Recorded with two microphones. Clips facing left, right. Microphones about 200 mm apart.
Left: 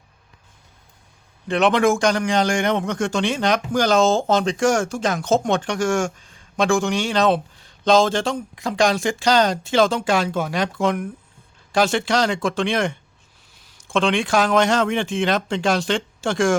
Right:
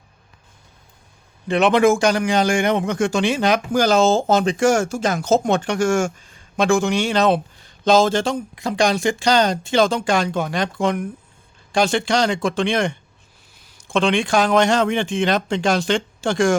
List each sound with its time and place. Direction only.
1.5 s a man's voice: centre (ahead or behind)